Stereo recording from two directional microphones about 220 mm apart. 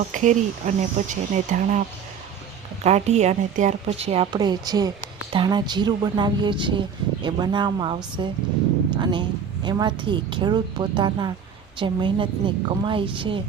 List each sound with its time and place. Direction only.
0.1 s speech: 35° right (ahead or behind)
2.8 s speech: 30° right (ahead or behind)